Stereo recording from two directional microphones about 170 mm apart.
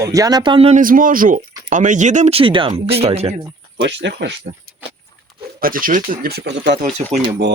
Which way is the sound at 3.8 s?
90° right.